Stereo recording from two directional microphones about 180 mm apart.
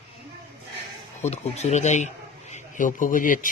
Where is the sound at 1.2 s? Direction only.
40° left (ahead or behind).